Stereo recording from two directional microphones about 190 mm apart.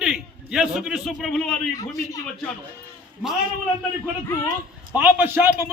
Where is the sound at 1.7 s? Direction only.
20° left (ahead or behind).